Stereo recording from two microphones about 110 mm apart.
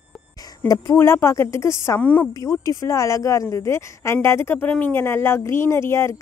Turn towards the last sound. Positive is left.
turn(degrees=25)  # may be behind; listen again after turning